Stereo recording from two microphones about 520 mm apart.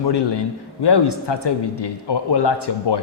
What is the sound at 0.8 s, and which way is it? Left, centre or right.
Speech, left.